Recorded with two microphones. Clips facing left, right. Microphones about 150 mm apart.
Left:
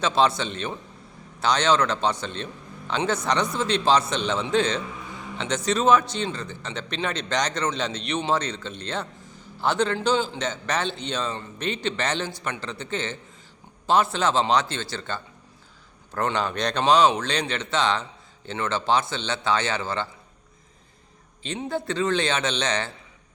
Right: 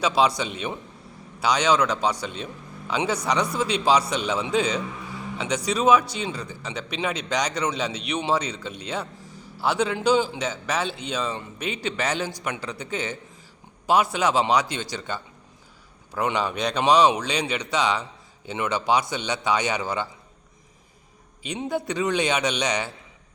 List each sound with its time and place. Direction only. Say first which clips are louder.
0.0 s a man's voice: even; 10° right (ahead or behind)
21.4 s a man's voice: right 1 dB; 15° right (ahead or behind)